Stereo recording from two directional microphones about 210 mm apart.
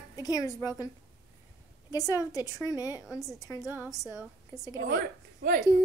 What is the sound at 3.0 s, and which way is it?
Speech, centre (ahead or behind).